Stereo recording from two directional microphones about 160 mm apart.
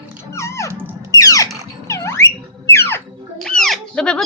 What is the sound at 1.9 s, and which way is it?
Music, 15° left (ahead or behind).